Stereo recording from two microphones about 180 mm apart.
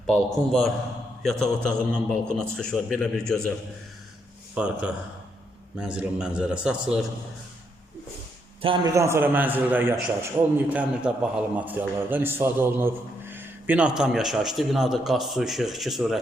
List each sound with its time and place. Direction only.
0.1 s a man's voice: 5° left (ahead or behind)
4.5 s a man's voice: 5° right (ahead or behind)
8.6 s a man's voice: 30° right (ahead or behind)
9.0 s a man's voice: 15° right (ahead or behind)
10.4 s a man's voice: 20° right (ahead or behind)
10.7 s a man's voice: 5° right (ahead or behind)